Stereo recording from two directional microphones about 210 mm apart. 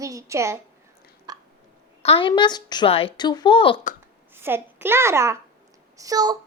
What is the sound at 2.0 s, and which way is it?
A woman's voice, 25° left (ahead or behind).